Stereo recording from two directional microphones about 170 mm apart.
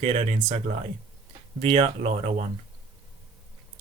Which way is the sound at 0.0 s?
35° right (ahead or behind).